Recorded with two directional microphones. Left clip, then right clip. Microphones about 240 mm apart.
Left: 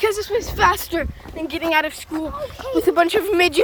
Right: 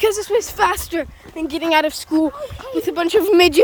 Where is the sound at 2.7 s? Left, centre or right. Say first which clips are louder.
Left 4 dB; centre.